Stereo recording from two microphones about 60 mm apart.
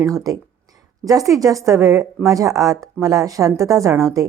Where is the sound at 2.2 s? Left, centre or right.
Right.